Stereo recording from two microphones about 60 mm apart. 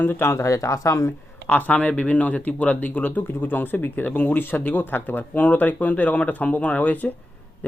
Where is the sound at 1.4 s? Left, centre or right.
Left.